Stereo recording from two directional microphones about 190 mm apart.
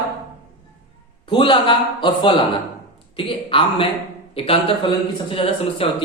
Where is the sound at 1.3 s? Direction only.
25° left (ahead or behind).